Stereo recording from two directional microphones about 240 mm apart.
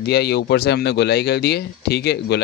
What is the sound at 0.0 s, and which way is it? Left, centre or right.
Speech, left.